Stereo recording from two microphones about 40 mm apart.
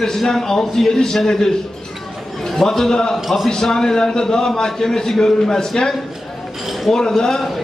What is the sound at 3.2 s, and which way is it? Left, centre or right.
Speech, centre.